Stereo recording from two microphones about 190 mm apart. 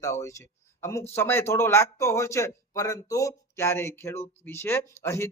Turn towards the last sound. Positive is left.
turn(degrees=15)  # may be behind; listen again after turning